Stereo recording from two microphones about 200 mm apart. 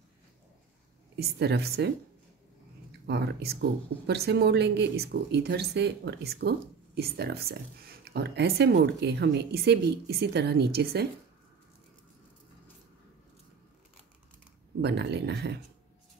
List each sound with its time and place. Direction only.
1.1 s speech: 55° right (ahead or behind)
3.1 s speech: 60° right (ahead or behind)
14.8 s speech: 60° right (ahead or behind)